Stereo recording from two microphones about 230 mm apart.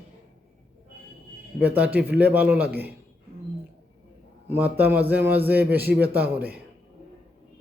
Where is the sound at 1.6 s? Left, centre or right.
Centre.